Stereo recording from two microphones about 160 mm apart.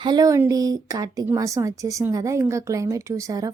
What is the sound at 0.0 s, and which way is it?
A woman's voice, 25° right (ahead or behind).